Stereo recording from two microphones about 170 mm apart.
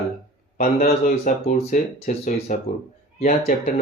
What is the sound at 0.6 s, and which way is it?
Speech, 50° left (ahead or behind).